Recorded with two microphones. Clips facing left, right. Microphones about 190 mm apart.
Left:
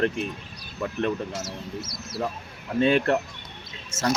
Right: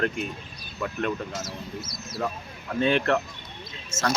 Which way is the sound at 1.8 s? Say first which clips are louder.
Left 1 dB; 70° left (ahead or behind).